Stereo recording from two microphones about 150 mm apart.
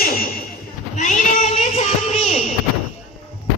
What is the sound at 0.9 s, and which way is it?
Female singing, 55° left (ahead or behind).